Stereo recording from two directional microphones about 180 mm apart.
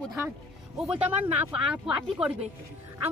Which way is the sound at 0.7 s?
5° right (ahead or behind).